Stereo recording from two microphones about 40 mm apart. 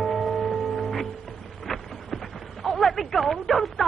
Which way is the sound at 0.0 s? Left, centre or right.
Centre.